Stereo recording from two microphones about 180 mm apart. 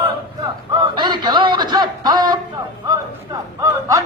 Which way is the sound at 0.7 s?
25° right (ahead or behind).